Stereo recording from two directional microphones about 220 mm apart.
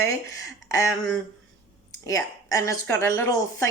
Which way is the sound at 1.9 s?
15° left (ahead or behind).